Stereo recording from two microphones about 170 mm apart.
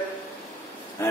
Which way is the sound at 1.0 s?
15° left (ahead or behind).